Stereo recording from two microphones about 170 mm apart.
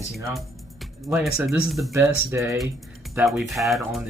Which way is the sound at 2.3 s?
15° right (ahead or behind).